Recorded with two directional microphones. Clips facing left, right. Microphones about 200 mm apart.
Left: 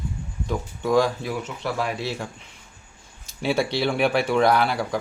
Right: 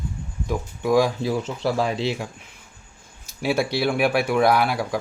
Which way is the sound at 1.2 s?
30° right (ahead or behind).